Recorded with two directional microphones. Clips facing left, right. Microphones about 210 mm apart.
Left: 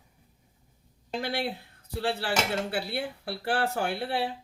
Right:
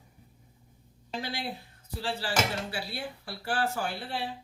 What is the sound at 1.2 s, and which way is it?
A woman's voice, 55° left (ahead or behind).